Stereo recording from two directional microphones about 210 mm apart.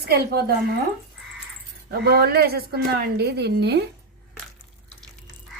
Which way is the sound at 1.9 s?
50° right (ahead or behind).